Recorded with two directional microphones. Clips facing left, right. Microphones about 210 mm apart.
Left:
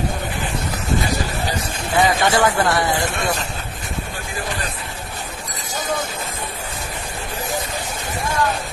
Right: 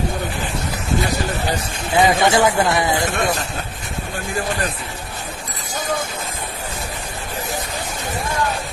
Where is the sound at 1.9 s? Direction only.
20° right (ahead or behind).